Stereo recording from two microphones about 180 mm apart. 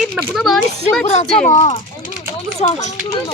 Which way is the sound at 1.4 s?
40° left (ahead or behind).